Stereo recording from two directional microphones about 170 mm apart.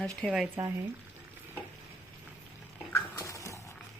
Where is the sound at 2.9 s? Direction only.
20° left (ahead or behind).